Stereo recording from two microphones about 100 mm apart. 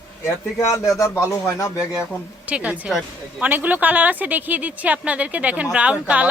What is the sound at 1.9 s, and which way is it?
A woman's voice, 10° right (ahead or behind).